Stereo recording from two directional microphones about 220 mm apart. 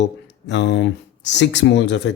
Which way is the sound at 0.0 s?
55° left (ahead or behind).